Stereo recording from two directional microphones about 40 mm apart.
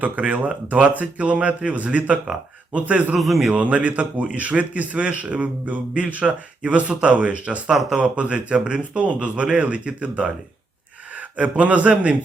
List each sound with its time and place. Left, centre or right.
0.0 s speech: right
3.2 s speech: centre
3.5 s speech: right